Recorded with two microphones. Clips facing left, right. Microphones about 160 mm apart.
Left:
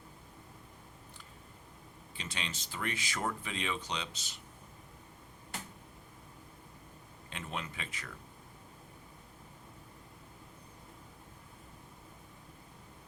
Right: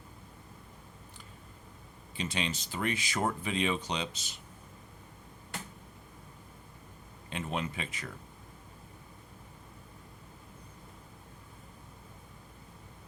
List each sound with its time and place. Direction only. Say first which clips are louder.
2.1 s speech: right 8 dB; 15° right (ahead or behind)
7.3 s speech: right 6 dB; 20° right (ahead or behind)